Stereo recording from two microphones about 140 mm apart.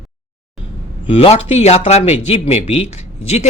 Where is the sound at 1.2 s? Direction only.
50° left (ahead or behind).